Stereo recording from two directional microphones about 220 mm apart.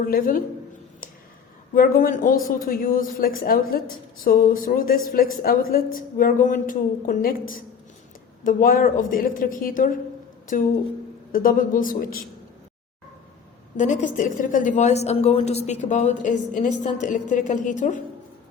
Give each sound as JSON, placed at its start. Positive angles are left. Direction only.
{"t": 0.1, "sound": "speech", "side_deg": 40}
{"t": 1.7, "sound": "speech", "side_deg": 40}
{"t": 13.7, "sound": "speech", "side_deg": 35}